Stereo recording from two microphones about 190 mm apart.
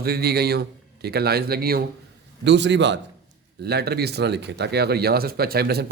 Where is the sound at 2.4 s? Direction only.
65° right (ahead or behind).